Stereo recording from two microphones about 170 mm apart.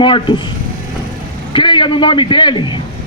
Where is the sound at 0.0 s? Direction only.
30° left (ahead or behind).